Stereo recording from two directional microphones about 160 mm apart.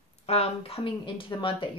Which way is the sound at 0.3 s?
40° left (ahead or behind).